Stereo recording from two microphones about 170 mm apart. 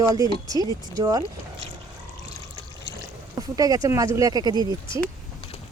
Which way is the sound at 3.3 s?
20° right (ahead or behind).